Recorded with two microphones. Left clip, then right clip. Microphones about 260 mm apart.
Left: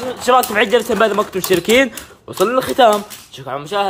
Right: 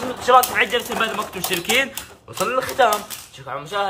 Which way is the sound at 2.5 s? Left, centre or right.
Left.